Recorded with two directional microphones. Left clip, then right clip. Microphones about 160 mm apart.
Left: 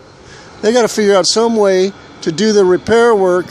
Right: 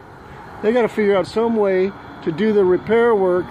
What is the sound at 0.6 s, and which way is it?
Speech, 40° left (ahead or behind).